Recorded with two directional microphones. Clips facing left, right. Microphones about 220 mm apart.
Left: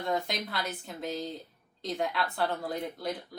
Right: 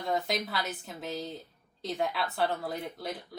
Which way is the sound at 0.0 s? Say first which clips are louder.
Right 1 dB; centre (ahead or behind).